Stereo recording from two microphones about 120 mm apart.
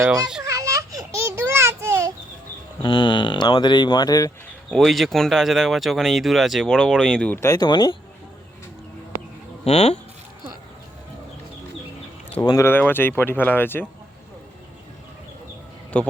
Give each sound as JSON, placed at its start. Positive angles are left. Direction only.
{"t": 0.4, "sound": "a sound", "side_deg": -25}
{"t": 2.8, "sound": "speech", "side_deg": 45}
{"t": 4.7, "sound": "speech", "side_deg": 0}
{"t": 7.3, "sound": "speech", "side_deg": 25}
{"t": 9.6, "sound": "speech", "side_deg": 60}
{"t": 12.4, "sound": "speech", "side_deg": 25}
{"t": 15.9, "sound": "speech", "side_deg": 10}